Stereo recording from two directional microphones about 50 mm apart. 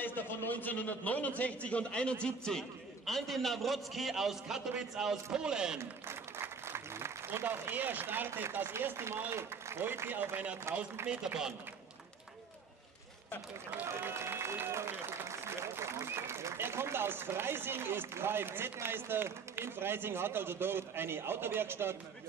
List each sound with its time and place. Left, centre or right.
0.0 s a man's voice: left; by 5.8 s centre
5.8 s applause: right
7.2 s speech: right
7.7 s a man's voice: right
8.9 s speech: right
10.3 s speech: right
13.8 s a man's voice: right